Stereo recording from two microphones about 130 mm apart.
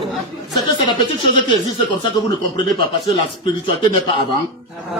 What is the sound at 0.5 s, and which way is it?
Speech, 35° left (ahead or behind).